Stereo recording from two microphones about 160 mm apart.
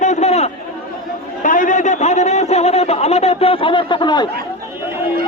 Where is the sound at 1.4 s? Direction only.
55° left (ahead or behind); by 4.2 s 30° left (ahead or behind).